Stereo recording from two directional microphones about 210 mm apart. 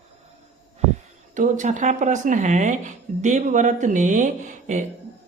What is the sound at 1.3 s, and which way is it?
Speech, 35° right (ahead or behind).